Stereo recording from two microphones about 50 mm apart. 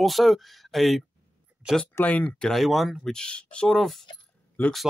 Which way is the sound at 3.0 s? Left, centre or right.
Centre.